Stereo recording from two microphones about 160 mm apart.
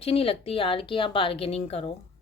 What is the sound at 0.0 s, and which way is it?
A woman's voice, 35° left (ahead or behind).